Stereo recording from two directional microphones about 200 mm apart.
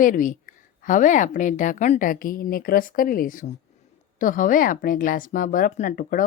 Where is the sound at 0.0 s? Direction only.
40° left (ahead or behind).